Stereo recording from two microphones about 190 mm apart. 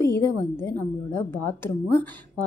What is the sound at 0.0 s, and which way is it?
A woman's voice, 15° left (ahead or behind).